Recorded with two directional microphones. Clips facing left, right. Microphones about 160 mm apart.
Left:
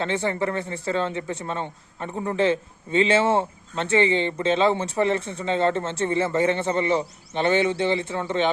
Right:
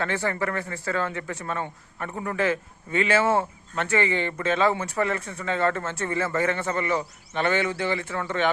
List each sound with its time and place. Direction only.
0.0 s speech: 20° left (ahead or behind)